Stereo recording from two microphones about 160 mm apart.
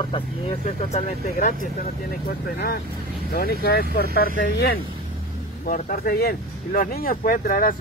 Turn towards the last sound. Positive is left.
turn(degrees=60)  # may be behind; listen again after turning